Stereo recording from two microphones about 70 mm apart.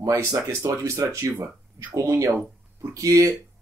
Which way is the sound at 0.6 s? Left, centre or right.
Right.